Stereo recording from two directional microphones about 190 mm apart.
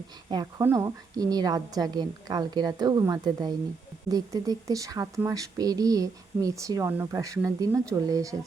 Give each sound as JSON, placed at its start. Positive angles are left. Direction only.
{"t": 0.6, "sound": "a woman's voice", "side_deg": -15}